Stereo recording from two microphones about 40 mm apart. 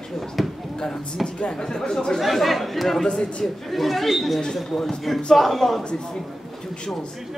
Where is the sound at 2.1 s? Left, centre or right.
Centre.